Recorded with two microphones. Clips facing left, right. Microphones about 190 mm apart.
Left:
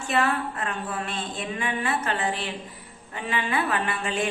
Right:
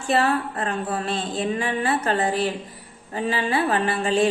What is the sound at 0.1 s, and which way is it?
A woman's voice, 35° right (ahead or behind).